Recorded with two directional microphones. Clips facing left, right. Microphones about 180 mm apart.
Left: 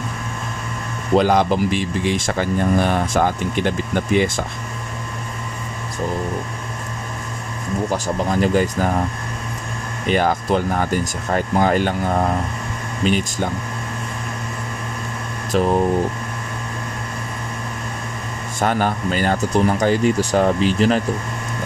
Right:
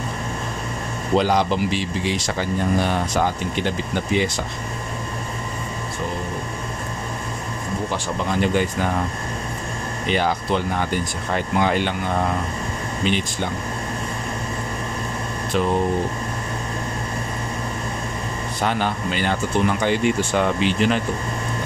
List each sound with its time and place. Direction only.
1.1 s speech: 50° left (ahead or behind)
7.9 s speech: 40° left (ahead or behind)
10.0 s speech: 45° left (ahead or behind)
15.5 s speech: 40° left (ahead or behind)
18.6 s speech: 45° left (ahead or behind)